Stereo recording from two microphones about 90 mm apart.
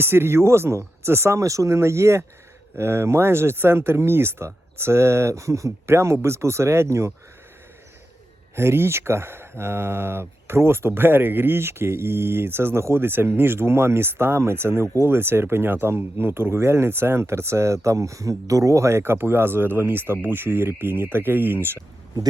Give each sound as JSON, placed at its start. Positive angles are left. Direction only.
{"t": 0.0, "sound": "speech", "side_deg": -25}
{"t": 8.5, "sound": "speech", "side_deg": -30}